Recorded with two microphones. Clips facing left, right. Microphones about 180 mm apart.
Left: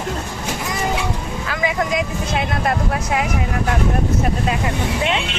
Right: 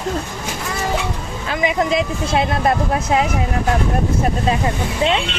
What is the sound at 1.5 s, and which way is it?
Speech, 20° right (ahead or behind).